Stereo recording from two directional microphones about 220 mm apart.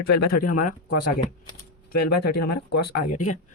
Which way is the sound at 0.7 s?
90° left.